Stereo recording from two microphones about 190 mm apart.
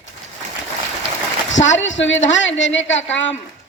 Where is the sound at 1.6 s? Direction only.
75° left (ahead or behind).